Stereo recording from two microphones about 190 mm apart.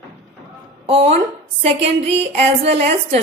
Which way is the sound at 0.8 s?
30° right (ahead or behind).